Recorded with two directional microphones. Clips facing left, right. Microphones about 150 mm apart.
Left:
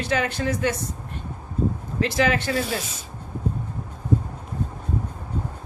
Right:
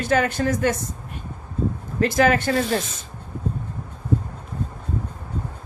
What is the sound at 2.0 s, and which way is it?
Speech, 45° right (ahead or behind).